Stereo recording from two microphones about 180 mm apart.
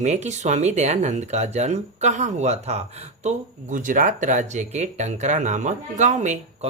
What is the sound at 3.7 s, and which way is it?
Speech, 45° right (ahead or behind).